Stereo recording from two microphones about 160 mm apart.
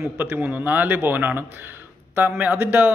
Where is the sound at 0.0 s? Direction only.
10° right (ahead or behind).